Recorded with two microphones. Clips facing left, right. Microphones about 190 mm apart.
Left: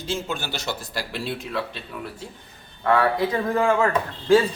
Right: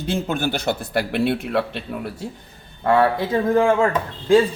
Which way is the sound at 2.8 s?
30° right (ahead or behind).